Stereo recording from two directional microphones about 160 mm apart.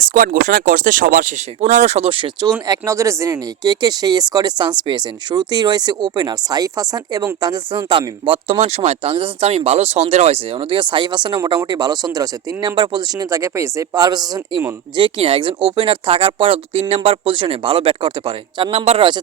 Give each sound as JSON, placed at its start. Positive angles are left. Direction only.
{"t": 0.0, "sound": "speech", "side_deg": -60}